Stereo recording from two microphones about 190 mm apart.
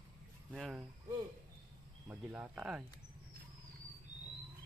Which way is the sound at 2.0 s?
5° right (ahead or behind).